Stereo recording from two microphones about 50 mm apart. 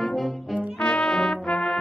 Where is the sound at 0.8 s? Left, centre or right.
Centre.